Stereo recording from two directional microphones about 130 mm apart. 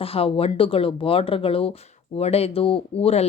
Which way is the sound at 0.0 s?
45° left (ahead or behind).